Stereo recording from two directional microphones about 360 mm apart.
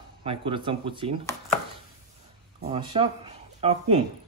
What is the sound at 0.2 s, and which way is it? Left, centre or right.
Speech, centre.